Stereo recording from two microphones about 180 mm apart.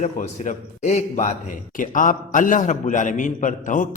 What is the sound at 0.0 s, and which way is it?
Speech, 40° left (ahead or behind).